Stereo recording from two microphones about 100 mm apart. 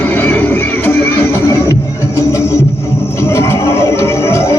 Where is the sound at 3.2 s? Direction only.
25° left (ahead or behind).